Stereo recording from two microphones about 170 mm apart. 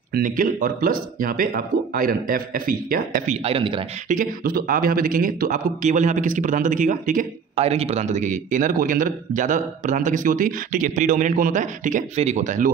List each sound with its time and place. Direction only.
0.1 s speech: 55° right (ahead or behind)
3.4 s speech: 35° right (ahead or behind)
4.1 s speech: 55° right (ahead or behind)